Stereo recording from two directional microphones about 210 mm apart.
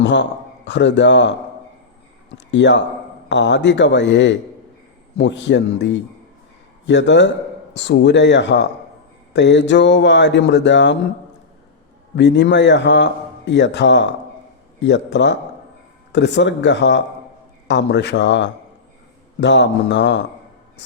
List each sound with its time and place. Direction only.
0.0 s a man's voice: 60° left (ahead or behind)
2.5 s a man's voice: 60° left (ahead or behind)
12.1 s a man's voice: 55° left (ahead or behind)